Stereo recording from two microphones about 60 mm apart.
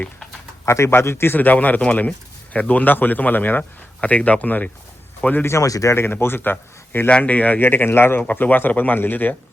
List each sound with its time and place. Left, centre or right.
0.6 s speech: left
5.5 s speech: left
6.0 s speech: left
7.1 s speech: left